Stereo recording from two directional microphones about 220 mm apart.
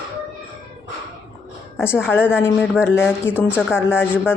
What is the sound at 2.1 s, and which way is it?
Speech, 10° left (ahead or behind).